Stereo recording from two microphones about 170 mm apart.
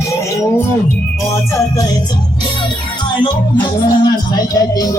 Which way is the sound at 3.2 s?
25° left (ahead or behind).